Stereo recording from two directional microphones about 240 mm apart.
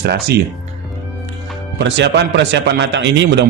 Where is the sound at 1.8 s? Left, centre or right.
Right.